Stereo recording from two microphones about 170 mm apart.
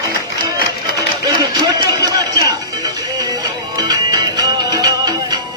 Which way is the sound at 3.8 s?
25° right (ahead or behind).